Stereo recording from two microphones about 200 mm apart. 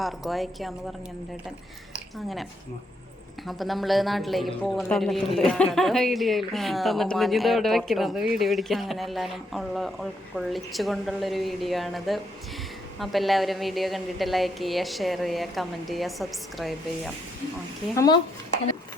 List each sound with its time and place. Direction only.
0.0 s speech: centre (ahead or behind)
2.1 s speech: centre (ahead or behind)
17.9 s speech: 20° left (ahead or behind)